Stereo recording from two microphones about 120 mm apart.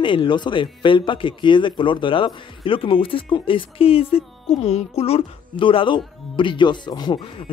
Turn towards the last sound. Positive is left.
turn(degrees=40)  # may be behind; listen again after turning